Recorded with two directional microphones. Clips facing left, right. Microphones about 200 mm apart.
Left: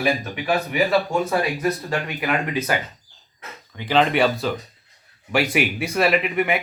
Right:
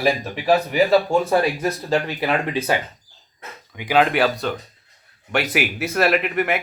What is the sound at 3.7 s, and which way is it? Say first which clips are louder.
Speech: right 1 dB; 10° right (ahead or behind).